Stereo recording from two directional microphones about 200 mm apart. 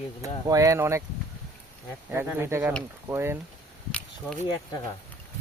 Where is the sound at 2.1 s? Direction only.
10° right (ahead or behind).